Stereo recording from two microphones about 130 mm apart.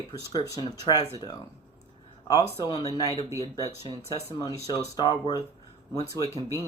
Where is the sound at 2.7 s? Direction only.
25° left (ahead or behind).